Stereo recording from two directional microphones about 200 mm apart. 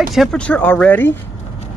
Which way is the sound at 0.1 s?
Centre (ahead or behind).